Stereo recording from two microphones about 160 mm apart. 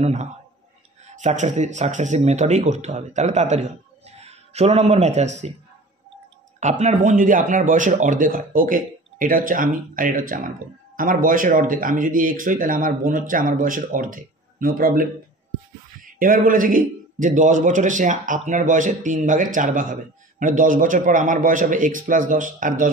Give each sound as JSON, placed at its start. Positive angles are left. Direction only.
{"t": 0.0, "sound": "speech", "side_deg": -45}
{"t": 6.6, "sound": "a man's voice", "side_deg": -45}